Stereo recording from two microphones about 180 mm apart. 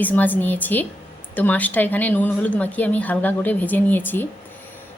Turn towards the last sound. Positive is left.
turn(degrees=10)  # may be behind; listen again after turning